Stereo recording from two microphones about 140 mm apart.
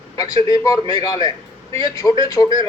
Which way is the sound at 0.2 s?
25° left (ahead or behind).